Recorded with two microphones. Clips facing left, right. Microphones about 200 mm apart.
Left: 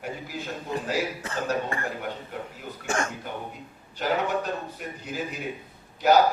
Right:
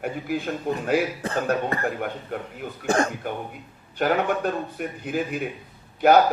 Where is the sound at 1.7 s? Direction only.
35° right (ahead or behind).